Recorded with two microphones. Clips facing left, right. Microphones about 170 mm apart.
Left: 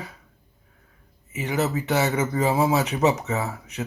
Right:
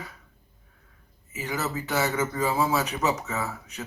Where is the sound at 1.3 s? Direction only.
20° left (ahead or behind).